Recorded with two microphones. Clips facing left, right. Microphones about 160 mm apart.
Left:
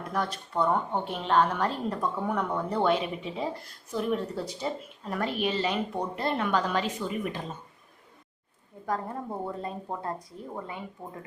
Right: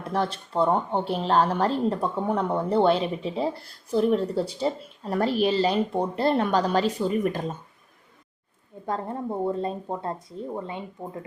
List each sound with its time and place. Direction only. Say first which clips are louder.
0.0 s speech: right 4 dB; 30° right (ahead or behind)
8.9 s speech: right 3 dB; 25° right (ahead or behind)